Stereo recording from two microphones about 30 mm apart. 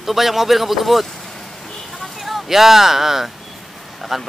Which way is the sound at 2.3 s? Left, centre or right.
Centre.